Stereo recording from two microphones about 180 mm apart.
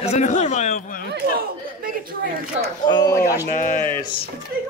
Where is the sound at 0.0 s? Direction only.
40° left (ahead or behind).